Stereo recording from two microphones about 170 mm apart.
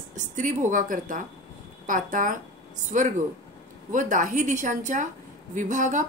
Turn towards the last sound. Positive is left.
turn(degrees=-50)  # may be behind; listen again after turning